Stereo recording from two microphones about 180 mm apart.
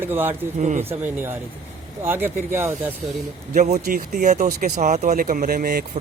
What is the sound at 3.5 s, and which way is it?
Speech, 40° right (ahead or behind).